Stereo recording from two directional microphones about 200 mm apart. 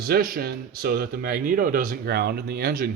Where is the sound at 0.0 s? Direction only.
50° right (ahead or behind).